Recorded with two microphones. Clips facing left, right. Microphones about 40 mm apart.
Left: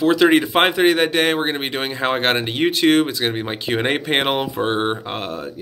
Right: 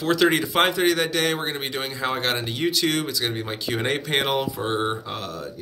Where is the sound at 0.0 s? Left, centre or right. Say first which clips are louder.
Left 6 dB; left.